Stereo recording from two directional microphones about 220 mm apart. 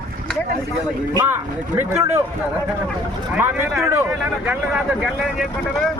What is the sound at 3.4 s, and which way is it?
Speech, 10° right (ahead or behind).